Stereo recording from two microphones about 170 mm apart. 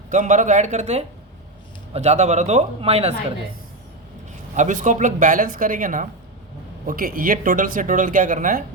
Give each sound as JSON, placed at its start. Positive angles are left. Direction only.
{"t": 0.1, "sound": "speech", "side_deg": -50}
{"t": 4.5, "sound": "speech", "side_deg": -45}